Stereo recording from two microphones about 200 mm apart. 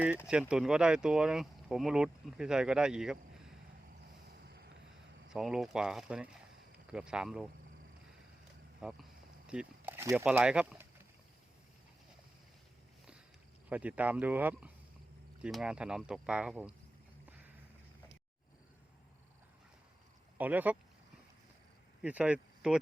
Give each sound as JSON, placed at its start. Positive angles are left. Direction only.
{"t": 0.3, "sound": "speech", "side_deg": -5}
{"t": 4.4, "sound": "vehicle", "side_deg": -55}
{"t": 5.3, "sound": "speech", "side_deg": 0}
{"t": 8.8, "sound": "speech", "side_deg": -5}
{"t": 13.7, "sound": "speech", "side_deg": -5}
{"t": 20.4, "sound": "speech", "side_deg": -10}
{"t": 22.0, "sound": "speech", "side_deg": -5}